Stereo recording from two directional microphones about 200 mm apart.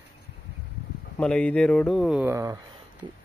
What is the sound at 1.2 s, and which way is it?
Speech, 5° left (ahead or behind).